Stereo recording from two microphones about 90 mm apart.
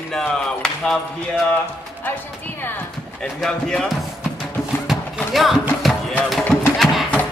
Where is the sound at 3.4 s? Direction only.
5° left (ahead or behind).